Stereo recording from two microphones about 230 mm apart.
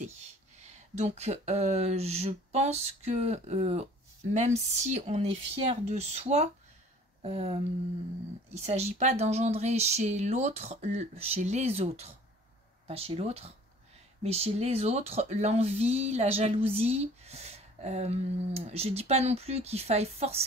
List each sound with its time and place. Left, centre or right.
0.7 s speech: right